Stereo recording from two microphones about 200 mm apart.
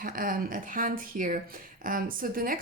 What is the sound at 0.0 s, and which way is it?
Speech, 45° right (ahead or behind).